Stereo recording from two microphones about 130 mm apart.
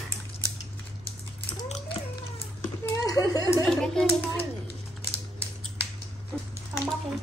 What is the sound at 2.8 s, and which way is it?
Speech, 25° left (ahead or behind).